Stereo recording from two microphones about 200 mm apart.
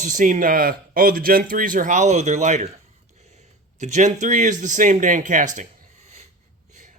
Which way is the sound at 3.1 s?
35° right (ahead or behind).